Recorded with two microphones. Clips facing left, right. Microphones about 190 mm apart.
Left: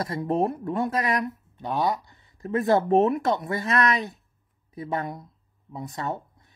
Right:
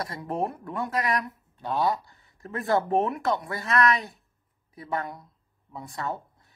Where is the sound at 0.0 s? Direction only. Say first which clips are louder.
Left 5 dB; 25° left (ahead or behind).